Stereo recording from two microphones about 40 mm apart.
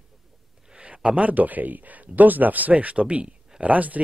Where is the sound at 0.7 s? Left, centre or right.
Right.